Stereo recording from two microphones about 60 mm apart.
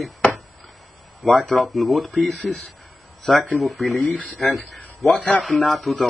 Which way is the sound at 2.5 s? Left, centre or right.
Right.